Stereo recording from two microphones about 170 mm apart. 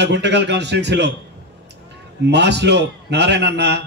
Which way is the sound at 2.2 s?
90° right.